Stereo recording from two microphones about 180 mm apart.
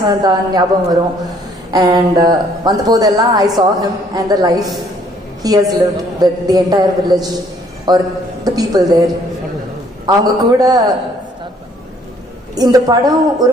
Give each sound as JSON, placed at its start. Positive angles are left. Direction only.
{"t": 0.2, "sound": "speech", "side_deg": -20}
{"t": 1.7, "sound": "speech", "side_deg": -20}
{"t": 12.5, "sound": "speech", "side_deg": -20}